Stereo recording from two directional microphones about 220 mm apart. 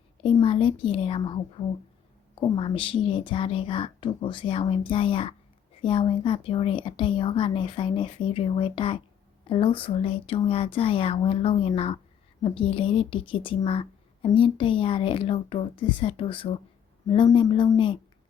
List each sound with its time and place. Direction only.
0.2 s speech: 20° left (ahead or behind)